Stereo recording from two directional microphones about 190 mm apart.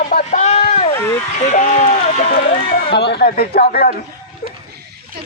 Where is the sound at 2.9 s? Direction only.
60° left (ahead or behind).